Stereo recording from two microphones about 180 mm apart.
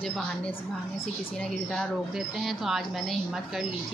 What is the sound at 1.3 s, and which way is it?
Speech, 5° left (ahead or behind).